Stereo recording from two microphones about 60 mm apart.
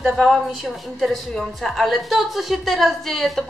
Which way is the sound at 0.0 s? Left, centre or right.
Centre.